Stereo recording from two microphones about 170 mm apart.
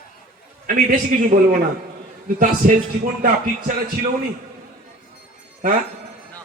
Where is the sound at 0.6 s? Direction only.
55° right (ahead or behind).